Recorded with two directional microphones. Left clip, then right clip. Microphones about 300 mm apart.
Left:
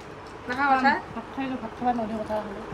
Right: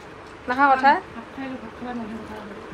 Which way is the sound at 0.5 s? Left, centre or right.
Centre.